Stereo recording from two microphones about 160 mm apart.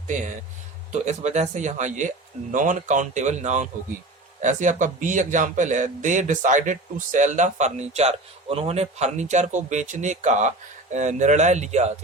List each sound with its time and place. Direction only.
0.9 s a man's voice: 45° right (ahead or behind)